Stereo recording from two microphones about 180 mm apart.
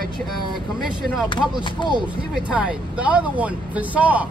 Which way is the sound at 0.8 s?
Centre (ahead or behind).